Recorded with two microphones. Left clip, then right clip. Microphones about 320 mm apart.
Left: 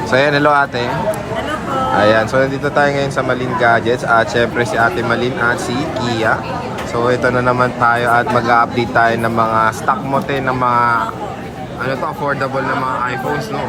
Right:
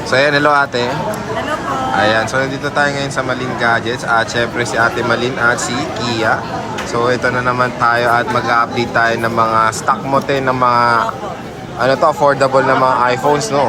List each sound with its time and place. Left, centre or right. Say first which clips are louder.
0.1 s speech: right 1 dB; centre
2.0 s speech: left 2 dB; centre